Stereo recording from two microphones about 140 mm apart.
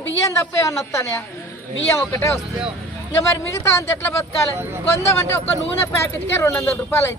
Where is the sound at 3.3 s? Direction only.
20° left (ahead or behind).